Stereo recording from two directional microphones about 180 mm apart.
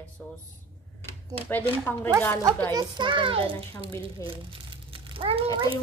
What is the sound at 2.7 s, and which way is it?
A child's voice, 25° right (ahead or behind).